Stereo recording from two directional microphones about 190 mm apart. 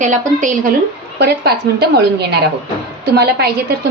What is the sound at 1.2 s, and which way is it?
A woman's voice, 60° right (ahead or behind).